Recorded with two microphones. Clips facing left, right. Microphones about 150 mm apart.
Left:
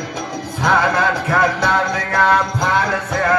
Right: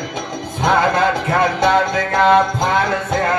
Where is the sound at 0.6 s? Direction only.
20° right (ahead or behind).